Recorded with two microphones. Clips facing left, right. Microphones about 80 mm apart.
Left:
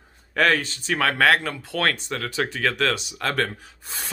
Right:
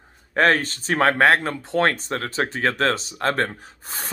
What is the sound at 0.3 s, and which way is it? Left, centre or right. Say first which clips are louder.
Speech: right 2 dB; right.